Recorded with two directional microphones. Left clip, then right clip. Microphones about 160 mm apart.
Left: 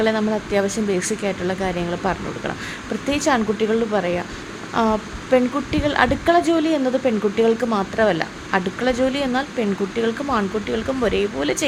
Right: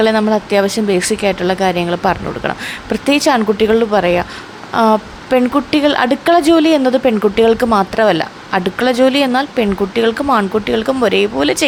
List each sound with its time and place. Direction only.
0.0 s a woman's voice: 25° right (ahead or behind)